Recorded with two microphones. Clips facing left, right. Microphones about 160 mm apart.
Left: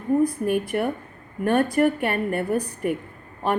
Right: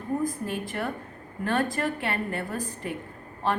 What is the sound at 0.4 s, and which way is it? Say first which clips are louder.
Speech: left 8 dB; 15° left (ahead or behind).